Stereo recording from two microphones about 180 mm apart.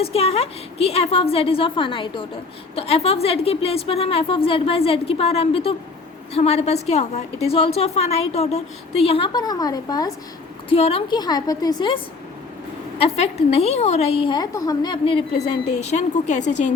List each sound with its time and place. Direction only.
0.0 s a woman's voice: 35° left (ahead or behind)
10.7 s a woman's voice: 35° left (ahead or behind)
13.0 s a woman's voice: 35° left (ahead or behind)
15.6 s a woman's voice: 40° left (ahead or behind)